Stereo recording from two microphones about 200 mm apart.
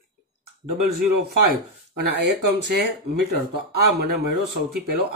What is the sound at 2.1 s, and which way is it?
Speech, 55° right (ahead or behind).